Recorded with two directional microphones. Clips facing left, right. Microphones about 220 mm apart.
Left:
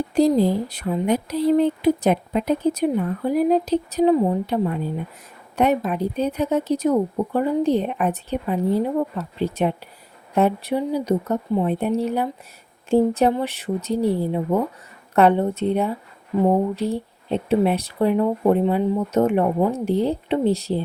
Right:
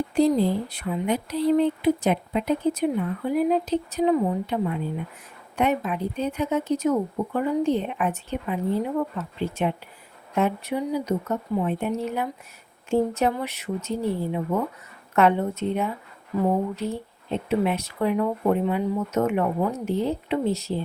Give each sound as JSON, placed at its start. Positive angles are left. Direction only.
{"t": 0.1, "sound": "speech", "side_deg": 40}